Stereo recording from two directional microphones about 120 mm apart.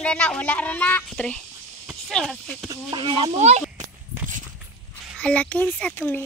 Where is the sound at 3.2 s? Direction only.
70° right (ahead or behind).